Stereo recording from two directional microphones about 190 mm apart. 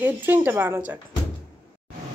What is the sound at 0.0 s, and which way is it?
Speech, 10° right (ahead or behind).